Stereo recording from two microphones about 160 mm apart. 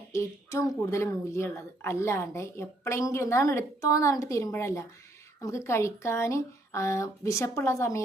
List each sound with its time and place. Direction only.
0.1 s speech: 20° left (ahead or behind)